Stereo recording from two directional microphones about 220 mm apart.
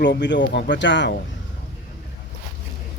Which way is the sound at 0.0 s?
55° left (ahead or behind).